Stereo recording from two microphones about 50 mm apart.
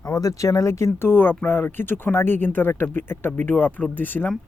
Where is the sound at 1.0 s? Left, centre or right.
Left.